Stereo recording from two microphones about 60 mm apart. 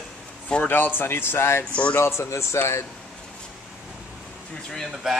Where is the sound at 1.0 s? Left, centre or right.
Left.